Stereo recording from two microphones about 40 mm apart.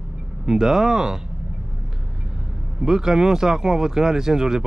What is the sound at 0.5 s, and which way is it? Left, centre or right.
Speech, centre.